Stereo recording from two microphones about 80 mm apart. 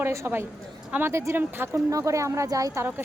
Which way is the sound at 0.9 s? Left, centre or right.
Right.